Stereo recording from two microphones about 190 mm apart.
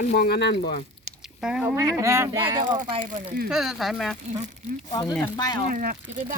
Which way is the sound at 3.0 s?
45° right (ahead or behind).